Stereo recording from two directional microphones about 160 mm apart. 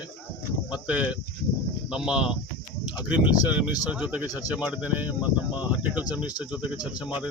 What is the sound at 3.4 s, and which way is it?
Speech, 10° right (ahead or behind).